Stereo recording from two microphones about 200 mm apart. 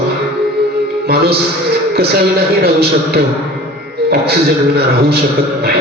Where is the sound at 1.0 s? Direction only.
55° right (ahead or behind).